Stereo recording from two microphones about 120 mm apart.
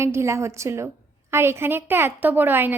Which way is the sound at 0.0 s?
25° right (ahead or behind).